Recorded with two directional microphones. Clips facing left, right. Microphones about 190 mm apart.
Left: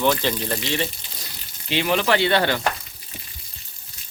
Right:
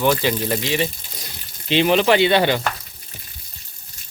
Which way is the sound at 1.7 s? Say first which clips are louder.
Right 5 dB; 20° right (ahead or behind).